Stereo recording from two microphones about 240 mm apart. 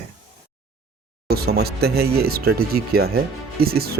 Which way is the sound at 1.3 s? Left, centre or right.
Right.